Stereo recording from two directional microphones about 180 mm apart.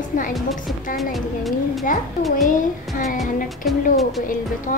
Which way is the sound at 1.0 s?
Centre (ahead or behind).